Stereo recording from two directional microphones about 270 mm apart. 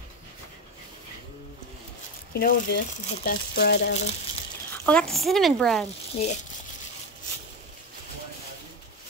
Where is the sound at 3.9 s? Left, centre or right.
Left.